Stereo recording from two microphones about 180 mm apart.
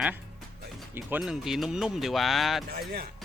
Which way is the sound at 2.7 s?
55° right (ahead or behind).